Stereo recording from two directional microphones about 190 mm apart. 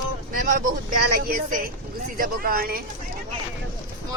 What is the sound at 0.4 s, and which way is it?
Speech, 45° right (ahead or behind).